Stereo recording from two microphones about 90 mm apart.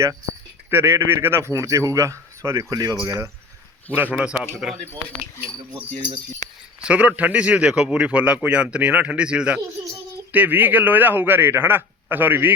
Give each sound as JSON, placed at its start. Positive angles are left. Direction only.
{"t": 0.7, "sound": "a man's voice", "side_deg": -25}
{"t": 3.9, "sound": "speech", "side_deg": -15}
{"t": 6.8, "sound": "speech", "side_deg": -15}
{"t": 9.6, "sound": "a man's voice", "side_deg": -35}
{"t": 10.3, "sound": "a man's voice", "side_deg": -20}